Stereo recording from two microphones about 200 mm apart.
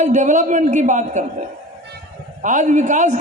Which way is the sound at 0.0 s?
40° right (ahead or behind).